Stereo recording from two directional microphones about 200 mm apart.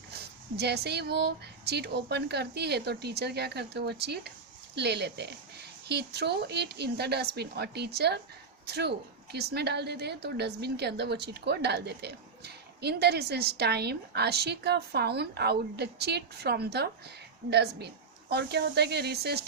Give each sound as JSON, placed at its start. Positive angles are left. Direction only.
{"t": 0.1, "sound": "a woman's voice", "side_deg": -55}